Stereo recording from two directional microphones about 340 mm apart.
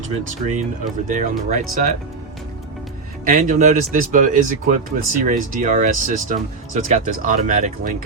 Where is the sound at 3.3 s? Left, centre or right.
Right.